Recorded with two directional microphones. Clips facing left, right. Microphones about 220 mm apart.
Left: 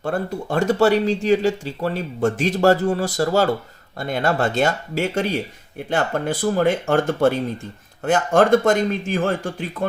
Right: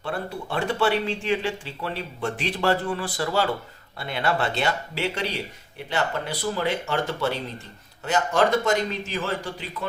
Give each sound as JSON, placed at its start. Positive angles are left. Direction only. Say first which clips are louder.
{"t": 0.0, "sound": "speech", "louder": "left 6 dB", "side_deg": 45}